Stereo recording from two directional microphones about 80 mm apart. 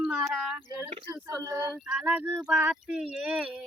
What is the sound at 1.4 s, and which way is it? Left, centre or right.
Speech, right.